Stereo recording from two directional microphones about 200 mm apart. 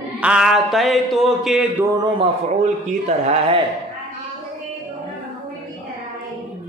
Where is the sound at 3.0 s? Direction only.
35° right (ahead or behind).